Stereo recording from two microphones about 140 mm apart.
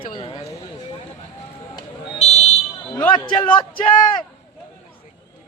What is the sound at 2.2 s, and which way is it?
Fire alarm, 50° left (ahead or behind).